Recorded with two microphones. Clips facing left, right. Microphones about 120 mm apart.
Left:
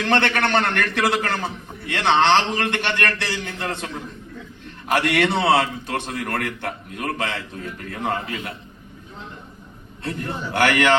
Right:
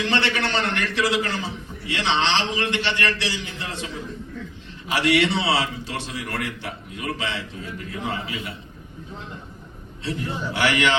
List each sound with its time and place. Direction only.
0.0 s a man's voice: 55° left (ahead or behind)
10.0 s a man's voice: 55° left (ahead or behind)